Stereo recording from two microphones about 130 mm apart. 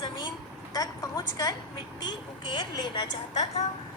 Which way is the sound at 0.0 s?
35° left (ahead or behind).